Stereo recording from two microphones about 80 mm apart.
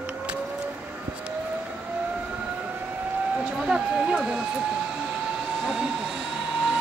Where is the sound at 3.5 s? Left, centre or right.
Centre.